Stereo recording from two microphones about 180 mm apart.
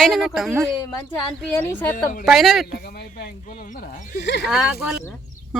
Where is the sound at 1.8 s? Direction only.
10° left (ahead or behind).